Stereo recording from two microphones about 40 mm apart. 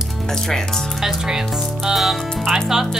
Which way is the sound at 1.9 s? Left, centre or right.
Centre.